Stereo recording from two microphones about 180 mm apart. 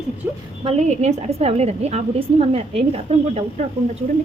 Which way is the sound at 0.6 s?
35° right (ahead or behind).